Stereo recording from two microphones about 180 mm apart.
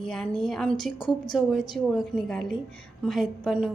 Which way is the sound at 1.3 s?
Centre (ahead or behind).